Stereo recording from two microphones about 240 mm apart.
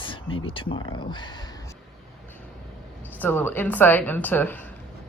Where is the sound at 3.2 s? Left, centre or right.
Centre.